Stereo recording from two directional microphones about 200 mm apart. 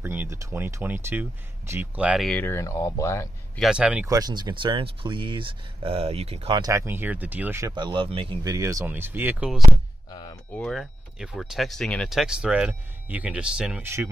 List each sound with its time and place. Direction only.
0.0 s speech: 10° right (ahead or behind); by 3.3 s 15° left (ahead or behind)
3.5 s speech: 5° right (ahead or behind)
4.1 s speech: 20° right (ahead or behind)
10.5 s speech: centre (ahead or behind)